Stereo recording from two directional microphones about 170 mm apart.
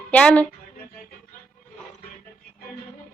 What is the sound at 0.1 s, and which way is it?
Speech, 10° left (ahead or behind).